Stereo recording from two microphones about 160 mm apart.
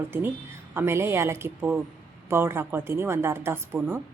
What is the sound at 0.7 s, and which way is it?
Speech, 15° right (ahead or behind).